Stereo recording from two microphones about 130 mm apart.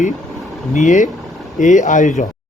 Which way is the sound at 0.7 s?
70° left (ahead or behind).